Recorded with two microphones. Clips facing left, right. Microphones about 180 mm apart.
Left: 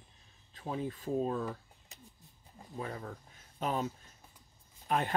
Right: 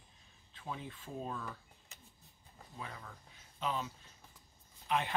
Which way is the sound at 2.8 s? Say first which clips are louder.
Left 8 dB; 40° left (ahead or behind).